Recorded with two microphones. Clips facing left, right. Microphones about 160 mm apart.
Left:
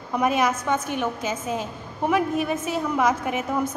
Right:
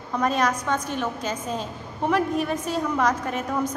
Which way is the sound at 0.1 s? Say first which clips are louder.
Left 1 dB; 10° left (ahead or behind).